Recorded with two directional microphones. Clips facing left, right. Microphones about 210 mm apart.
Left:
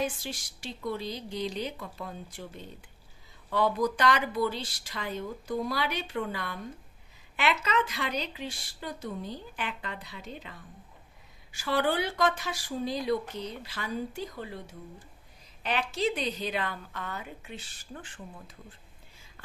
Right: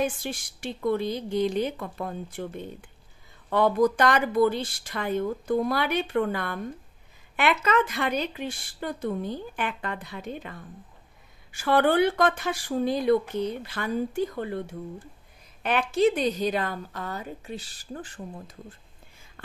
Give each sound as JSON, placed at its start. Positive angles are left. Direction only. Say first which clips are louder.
{"t": 0.0, "sound": "a woman's voice", "louder": "right 5 dB", "side_deg": -55}